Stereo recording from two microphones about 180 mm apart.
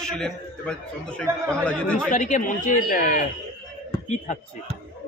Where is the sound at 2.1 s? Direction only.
50° left (ahead or behind).